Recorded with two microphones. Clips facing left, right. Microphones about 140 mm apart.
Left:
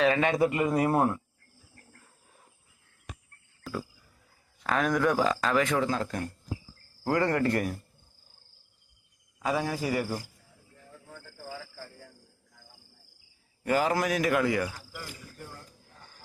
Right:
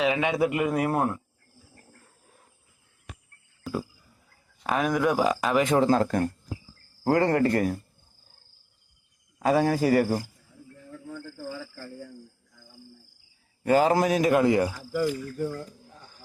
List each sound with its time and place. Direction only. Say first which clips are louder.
0.0 s speech: even; 10° right (ahead or behind)
4.6 s speech: right 2 dB; 15° right (ahead or behind)
5.7 s speech: right 7 dB; 35° right (ahead or behind)
7.0 s speech: right 4 dB; 30° right (ahead or behind)
9.4 s speech: right 7 dB; 50° right (ahead or behind)
13.7 s a man's voice: right 5 dB; 25° right (ahead or behind)